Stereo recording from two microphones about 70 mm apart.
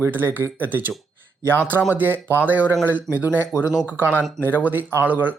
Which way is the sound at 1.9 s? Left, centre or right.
Right.